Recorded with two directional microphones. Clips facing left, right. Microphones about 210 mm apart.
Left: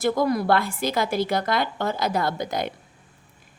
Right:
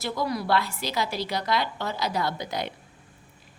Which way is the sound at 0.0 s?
50° left (ahead or behind).